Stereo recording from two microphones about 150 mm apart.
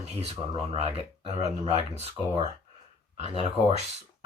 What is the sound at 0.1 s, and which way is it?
Speech, 45° right (ahead or behind).